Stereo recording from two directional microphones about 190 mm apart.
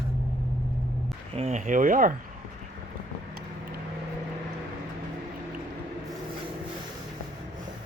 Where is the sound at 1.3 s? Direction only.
35° right (ahead or behind).